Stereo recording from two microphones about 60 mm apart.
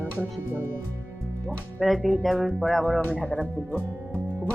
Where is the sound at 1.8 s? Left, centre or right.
Centre.